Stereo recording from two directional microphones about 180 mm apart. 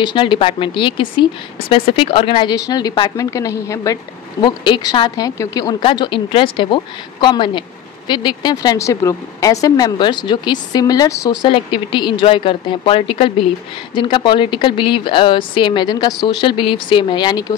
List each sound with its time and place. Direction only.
0.0 s a woman's voice: 25° left (ahead or behind)